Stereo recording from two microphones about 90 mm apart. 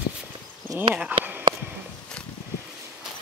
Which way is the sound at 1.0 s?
20° right (ahead or behind).